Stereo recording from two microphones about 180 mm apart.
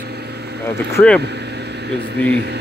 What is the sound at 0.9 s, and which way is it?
Speech, 5° left (ahead or behind).